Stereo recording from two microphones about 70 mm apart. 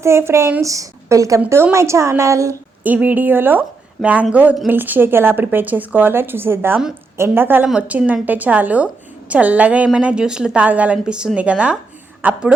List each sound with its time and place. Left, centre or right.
0.0 s a woman's voice: right
0.6 s a woman's voice: right
2.8 s a woman's voice: right